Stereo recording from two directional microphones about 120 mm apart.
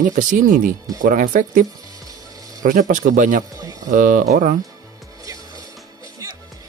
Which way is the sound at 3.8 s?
90° right.